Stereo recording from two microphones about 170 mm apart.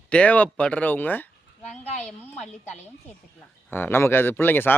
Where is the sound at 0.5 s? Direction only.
10° left (ahead or behind).